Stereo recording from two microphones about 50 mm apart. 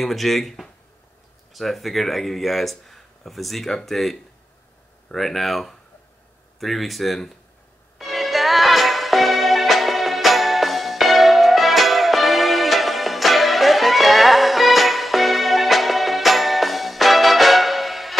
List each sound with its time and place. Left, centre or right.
0.0 s speech: centre
8.0 s music: centre